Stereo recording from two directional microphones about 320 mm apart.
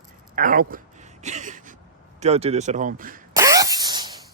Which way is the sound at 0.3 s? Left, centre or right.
Right.